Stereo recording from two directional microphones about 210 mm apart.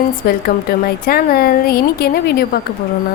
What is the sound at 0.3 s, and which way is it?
A woman's voice, 45° left (ahead or behind).